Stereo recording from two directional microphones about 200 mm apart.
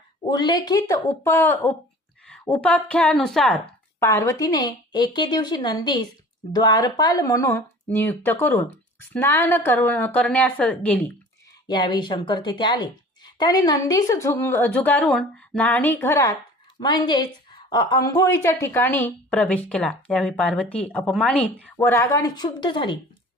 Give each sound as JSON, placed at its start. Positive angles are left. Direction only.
{"t": 0.3, "sound": "a woman's voice", "side_deg": 20}
{"t": 4.0, "sound": "a woman's voice", "side_deg": 15}
{"t": 11.7, "sound": "a woman's voice", "side_deg": 20}